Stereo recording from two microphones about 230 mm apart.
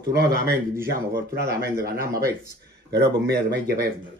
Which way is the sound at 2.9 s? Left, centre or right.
Right.